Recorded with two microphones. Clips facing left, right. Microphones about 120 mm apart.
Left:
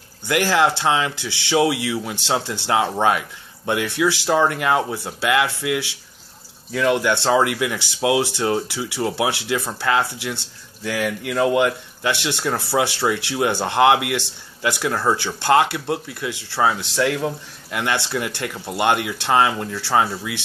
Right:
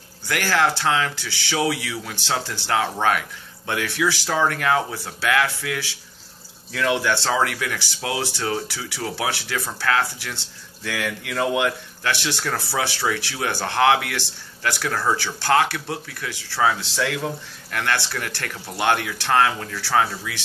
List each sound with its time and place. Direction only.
0.3 s speech: 20° left (ahead or behind)
6.7 s speech: 10° left (ahead or behind)
12.1 s speech: 20° left (ahead or behind)
16.6 s speech: 10° left (ahead or behind)